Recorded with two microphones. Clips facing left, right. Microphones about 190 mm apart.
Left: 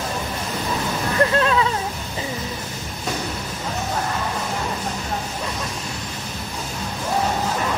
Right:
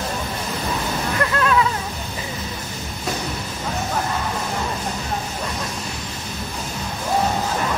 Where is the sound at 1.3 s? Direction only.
30° left (ahead or behind).